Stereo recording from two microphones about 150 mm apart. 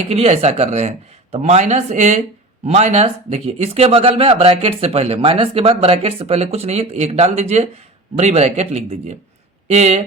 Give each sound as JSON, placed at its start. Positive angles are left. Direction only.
{"t": 0.1, "sound": "speech", "side_deg": -45}